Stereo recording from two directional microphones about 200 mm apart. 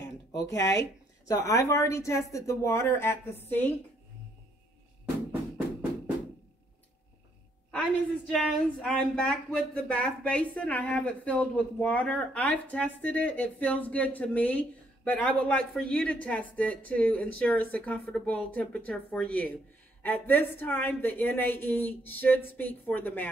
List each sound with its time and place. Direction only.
0.3 s a woman's voice: 15° left (ahead or behind)
7.7 s a woman's voice: 5° left (ahead or behind)